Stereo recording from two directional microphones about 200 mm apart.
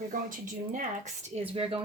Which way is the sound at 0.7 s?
35° right (ahead or behind).